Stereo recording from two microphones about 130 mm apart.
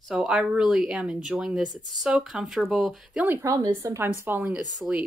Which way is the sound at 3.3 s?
20° right (ahead or behind).